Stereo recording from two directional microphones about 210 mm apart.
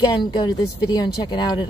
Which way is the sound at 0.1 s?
20° left (ahead or behind).